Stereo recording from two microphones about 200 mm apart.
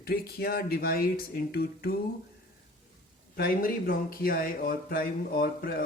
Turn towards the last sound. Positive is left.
turn(degrees=50)  # may be behind; listen again after turning